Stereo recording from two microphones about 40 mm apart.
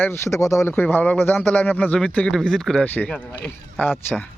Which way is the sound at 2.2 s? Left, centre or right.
Centre.